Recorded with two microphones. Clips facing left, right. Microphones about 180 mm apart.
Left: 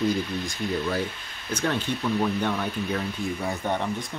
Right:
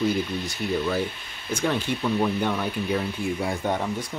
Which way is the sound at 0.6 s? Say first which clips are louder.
Right 2 dB; 5° right (ahead or behind).